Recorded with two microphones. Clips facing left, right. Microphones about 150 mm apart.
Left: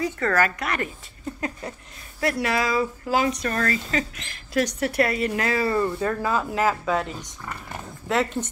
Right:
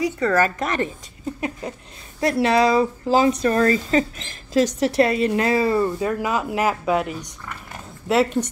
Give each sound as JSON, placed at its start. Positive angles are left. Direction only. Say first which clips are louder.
{"t": 0.0, "sound": "speech", "louder": "right 4 dB", "side_deg": -15}
{"t": 0.4, "sound": "speech", "louder": "right 3 dB", "side_deg": -30}
{"t": 2.1, "sound": "speech", "louder": "right 6 dB", "side_deg": -25}